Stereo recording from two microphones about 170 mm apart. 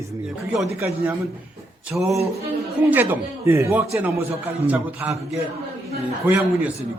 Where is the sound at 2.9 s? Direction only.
15° right (ahead or behind).